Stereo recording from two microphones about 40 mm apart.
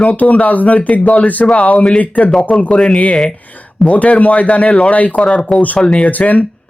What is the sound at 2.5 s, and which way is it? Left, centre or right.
Speech, centre.